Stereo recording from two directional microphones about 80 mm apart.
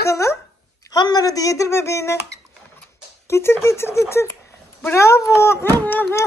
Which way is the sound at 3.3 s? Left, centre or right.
Left.